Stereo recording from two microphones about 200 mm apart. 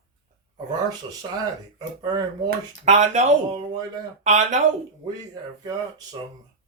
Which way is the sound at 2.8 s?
40° right (ahead or behind).